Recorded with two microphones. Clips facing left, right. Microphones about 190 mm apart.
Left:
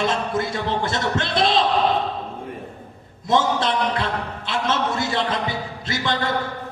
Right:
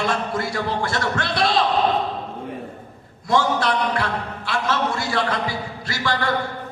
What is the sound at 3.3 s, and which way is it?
A man's voice, 20° left (ahead or behind).